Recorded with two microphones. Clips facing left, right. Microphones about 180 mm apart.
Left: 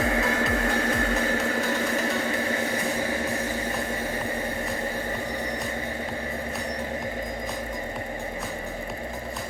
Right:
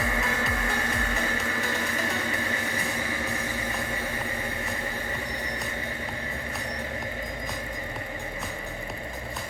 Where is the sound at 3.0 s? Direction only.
40° left (ahead or behind).